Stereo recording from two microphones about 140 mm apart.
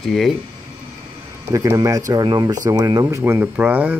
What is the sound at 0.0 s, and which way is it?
Speech, centre (ahead or behind).